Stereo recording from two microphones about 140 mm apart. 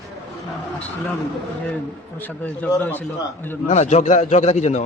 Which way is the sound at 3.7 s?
55° left (ahead or behind).